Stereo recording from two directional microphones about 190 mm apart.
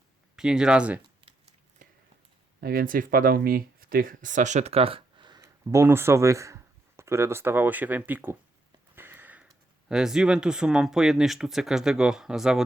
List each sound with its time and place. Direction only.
0.3 s speech: 5° right (ahead or behind)
1.2 s a sound: 35° right (ahead or behind)
2.6 s speech: 55° right (ahead or behind); by 8.4 s 10° right (ahead or behind)
9.0 s sniff: 10° right (ahead or behind)
9.9 s speech: 5° right (ahead or behind)